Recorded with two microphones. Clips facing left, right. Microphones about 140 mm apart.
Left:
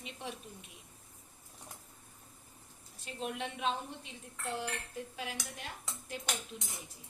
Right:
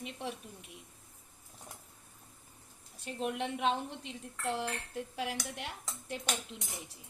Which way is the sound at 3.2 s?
65° right (ahead or behind).